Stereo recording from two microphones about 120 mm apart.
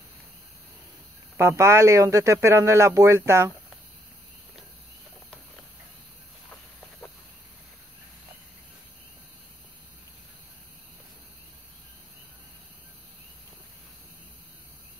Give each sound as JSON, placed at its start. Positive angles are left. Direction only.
{"t": 1.6, "sound": "speech", "side_deg": -25}